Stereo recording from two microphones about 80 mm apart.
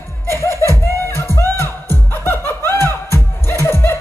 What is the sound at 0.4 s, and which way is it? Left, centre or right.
Laughter, left.